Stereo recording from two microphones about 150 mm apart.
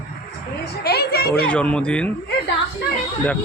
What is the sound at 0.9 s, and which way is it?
Speech, 90° left.